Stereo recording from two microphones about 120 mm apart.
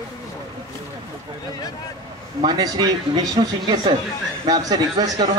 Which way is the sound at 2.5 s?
35° right (ahead or behind).